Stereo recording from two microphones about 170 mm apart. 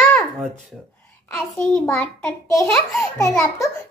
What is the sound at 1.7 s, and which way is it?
Speech, 10° left (ahead or behind).